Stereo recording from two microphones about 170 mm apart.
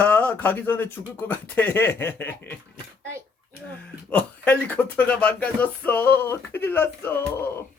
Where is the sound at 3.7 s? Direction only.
10° left (ahead or behind).